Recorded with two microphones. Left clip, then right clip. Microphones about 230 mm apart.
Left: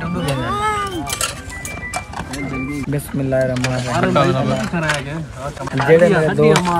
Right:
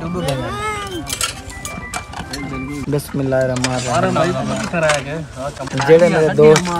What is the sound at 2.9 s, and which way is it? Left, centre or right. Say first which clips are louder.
Speech: right 2 dB; centre.